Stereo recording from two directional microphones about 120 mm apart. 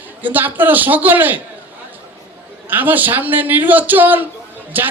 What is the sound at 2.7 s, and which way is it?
Speech, 15° right (ahead or behind).